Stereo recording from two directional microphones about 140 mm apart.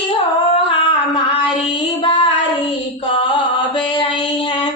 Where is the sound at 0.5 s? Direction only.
35° left (ahead or behind).